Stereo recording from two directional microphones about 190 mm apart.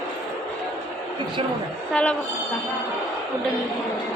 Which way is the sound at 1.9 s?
5° left (ahead or behind).